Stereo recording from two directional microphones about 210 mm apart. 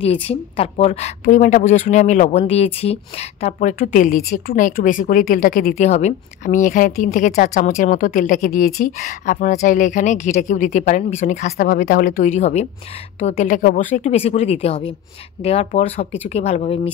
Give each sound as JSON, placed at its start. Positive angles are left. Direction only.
{"t": 0.0, "sound": "speech", "side_deg": 30}
{"t": 11.5, "sound": "a woman's voice", "side_deg": 45}